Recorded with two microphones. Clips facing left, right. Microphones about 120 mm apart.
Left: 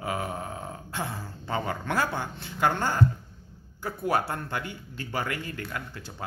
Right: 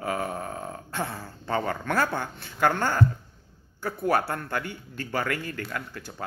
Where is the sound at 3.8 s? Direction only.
20° left (ahead or behind).